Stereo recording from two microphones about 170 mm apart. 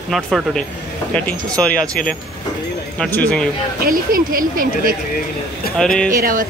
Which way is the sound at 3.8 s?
55° right (ahead or behind).